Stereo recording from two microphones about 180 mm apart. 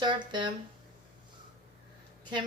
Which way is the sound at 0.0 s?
25° right (ahead or behind).